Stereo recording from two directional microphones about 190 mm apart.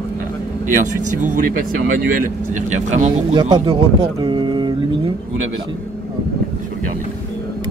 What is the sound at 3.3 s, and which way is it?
Speech, 25° right (ahead or behind).